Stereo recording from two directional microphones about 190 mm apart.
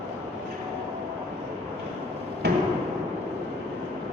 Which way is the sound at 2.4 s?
60° right (ahead or behind).